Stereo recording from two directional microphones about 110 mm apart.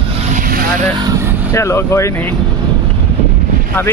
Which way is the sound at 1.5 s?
25° left (ahead or behind).